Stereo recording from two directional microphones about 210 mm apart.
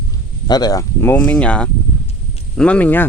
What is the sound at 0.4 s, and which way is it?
Speech, 20° left (ahead or behind).